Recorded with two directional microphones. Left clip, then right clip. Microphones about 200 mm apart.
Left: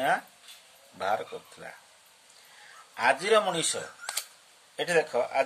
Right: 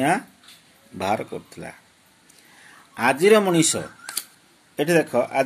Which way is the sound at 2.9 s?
25° right (ahead or behind).